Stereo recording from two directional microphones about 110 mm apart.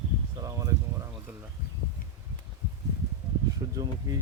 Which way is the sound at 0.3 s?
30° right (ahead or behind).